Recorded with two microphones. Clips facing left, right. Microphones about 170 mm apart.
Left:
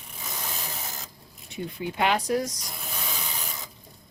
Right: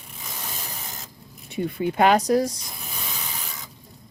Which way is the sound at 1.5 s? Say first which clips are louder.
Right 7 dB; 55° right (ahead or behind).